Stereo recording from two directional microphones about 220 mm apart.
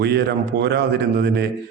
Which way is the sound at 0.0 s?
50° right (ahead or behind).